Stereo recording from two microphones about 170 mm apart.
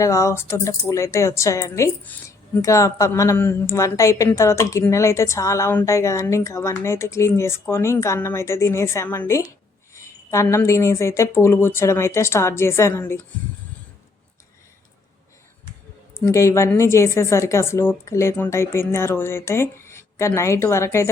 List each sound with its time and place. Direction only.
0.0 s a woman's voice: 20° left (ahead or behind)
16.2 s a woman's voice: 15° left (ahead or behind)